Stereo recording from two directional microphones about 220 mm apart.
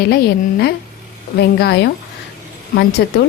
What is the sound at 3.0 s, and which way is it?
Speech, 50° left (ahead or behind).